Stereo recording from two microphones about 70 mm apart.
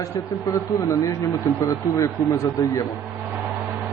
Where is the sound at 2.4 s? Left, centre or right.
Left.